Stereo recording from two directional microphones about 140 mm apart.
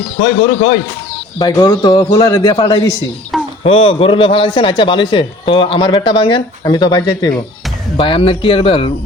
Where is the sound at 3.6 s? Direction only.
45° left (ahead or behind).